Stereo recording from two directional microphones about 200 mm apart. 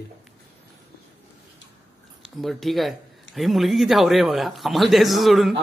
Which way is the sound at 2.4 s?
Centre (ahead or behind).